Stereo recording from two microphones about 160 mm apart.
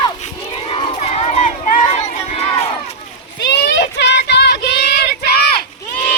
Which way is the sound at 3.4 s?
90° left.